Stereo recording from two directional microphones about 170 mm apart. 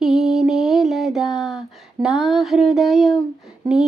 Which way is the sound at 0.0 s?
Centre (ahead or behind).